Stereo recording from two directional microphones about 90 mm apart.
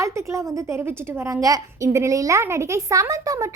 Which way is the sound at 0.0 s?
35° right (ahead or behind).